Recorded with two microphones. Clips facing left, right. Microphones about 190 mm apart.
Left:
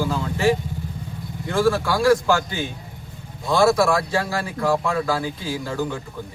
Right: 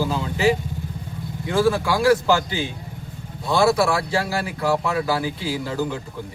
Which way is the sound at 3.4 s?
5° right (ahead or behind).